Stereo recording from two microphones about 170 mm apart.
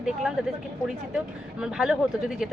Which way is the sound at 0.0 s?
Centre (ahead or behind).